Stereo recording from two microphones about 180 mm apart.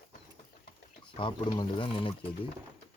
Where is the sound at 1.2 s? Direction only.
30° left (ahead or behind).